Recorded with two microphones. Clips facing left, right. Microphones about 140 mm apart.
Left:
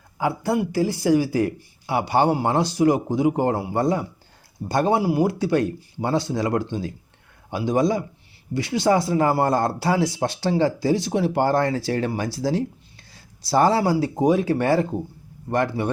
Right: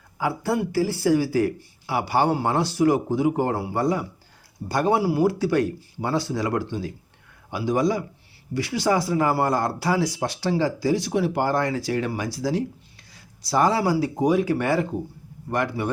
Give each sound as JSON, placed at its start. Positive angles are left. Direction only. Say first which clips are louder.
{"t": 0.2, "sound": "speech", "louder": "left 2 dB", "side_deg": 20}